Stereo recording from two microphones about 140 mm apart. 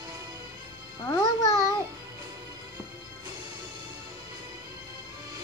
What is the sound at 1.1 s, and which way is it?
Music, 20° left (ahead or behind).